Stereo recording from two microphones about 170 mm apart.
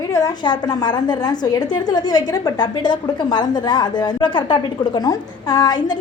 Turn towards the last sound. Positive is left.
turn(degrees=25)  # may be behind; listen again after turning